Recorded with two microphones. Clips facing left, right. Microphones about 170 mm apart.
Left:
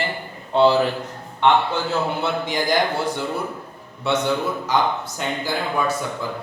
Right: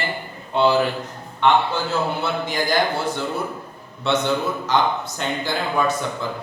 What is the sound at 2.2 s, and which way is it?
A man's voice, 15° left (ahead or behind).